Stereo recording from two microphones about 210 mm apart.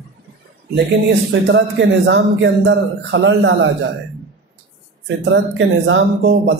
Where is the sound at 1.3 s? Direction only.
55° right (ahead or behind).